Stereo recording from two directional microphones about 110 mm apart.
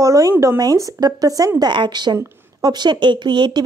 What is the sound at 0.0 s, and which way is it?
Speech, 30° right (ahead or behind).